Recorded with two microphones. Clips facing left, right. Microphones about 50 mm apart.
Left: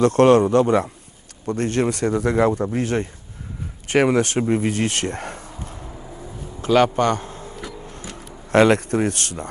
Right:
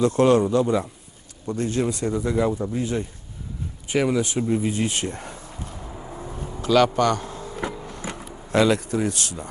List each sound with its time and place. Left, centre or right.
0.0 s speech: left
4.4 s speech: left
5.8 s a sound: centre
6.6 s a man's voice: left
7.5 s a sound: right
8.4 s speech: left